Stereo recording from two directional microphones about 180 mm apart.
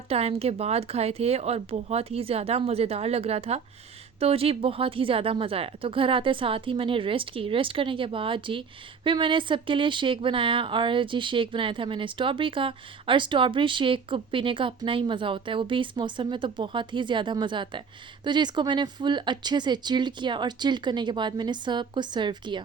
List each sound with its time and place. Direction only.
0.1 s speech: 35° right (ahead or behind)